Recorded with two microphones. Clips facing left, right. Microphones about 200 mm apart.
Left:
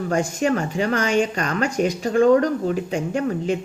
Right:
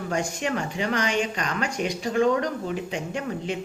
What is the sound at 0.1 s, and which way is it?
Speech, 45° left (ahead or behind).